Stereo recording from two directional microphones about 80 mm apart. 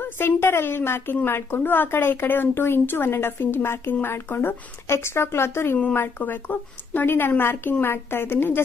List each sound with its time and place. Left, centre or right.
0.0 s a woman's voice: left